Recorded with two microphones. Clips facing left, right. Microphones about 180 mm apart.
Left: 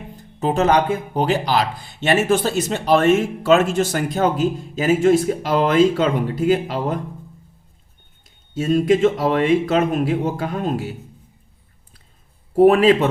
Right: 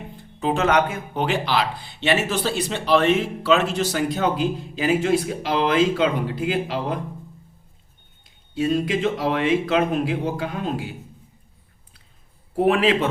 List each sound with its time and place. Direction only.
0.2 s speech: 40° left (ahead or behind)
8.5 s speech: 45° left (ahead or behind)
12.5 s speech: 45° left (ahead or behind)